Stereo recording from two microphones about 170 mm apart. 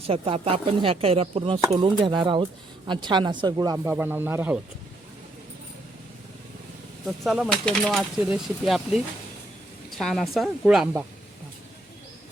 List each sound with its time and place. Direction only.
0.1 s speech: 35° right (ahead or behind)
3.8 s speech: 10° right (ahead or behind)
7.3 s speech: centre (ahead or behind)
10.0 s speech: centre (ahead or behind)